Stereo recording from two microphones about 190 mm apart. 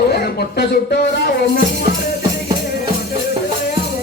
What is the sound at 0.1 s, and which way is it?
Speech, 60° left (ahead or behind).